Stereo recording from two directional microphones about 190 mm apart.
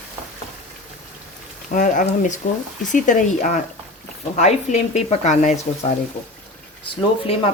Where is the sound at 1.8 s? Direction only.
40° left (ahead or behind).